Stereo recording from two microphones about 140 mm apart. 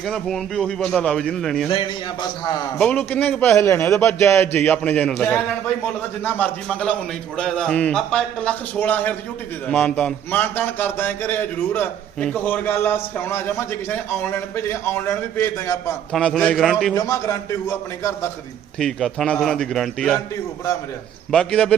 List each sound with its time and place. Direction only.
0.0 s a man's voice: centre (ahead or behind)
2.7 s a man's voice: 10° left (ahead or behind)
16.1 s a man's voice: 5° left (ahead or behind)
16.9 s a man's voice: 20° left (ahead or behind)
18.8 s a man's voice: centre (ahead or behind)
21.3 s speech: 5° left (ahead or behind)